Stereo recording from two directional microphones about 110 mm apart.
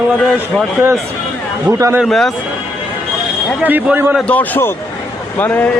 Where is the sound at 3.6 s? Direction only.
15° right (ahead or behind).